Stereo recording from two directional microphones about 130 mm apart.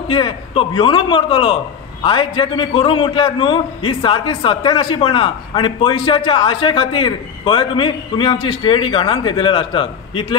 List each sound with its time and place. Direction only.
0.1 s a man's voice: 40° left (ahead or behind)